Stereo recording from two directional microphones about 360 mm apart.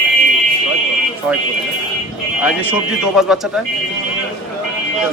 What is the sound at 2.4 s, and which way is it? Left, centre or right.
Speech, centre.